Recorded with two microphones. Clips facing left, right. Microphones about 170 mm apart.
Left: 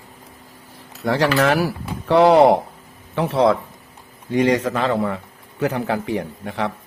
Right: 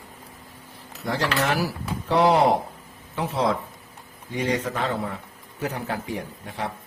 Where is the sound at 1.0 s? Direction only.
70° left (ahead or behind).